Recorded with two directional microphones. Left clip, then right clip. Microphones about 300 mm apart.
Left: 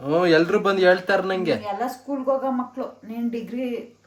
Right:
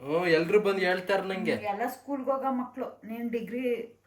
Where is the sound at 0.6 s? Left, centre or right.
Centre.